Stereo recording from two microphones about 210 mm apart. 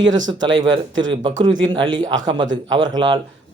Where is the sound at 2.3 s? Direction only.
60° right (ahead or behind).